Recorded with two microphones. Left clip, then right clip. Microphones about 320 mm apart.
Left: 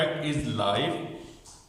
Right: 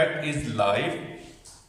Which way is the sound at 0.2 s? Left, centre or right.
Right.